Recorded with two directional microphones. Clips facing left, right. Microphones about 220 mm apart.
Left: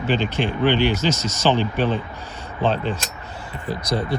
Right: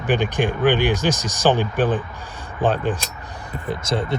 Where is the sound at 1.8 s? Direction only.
50° right (ahead or behind).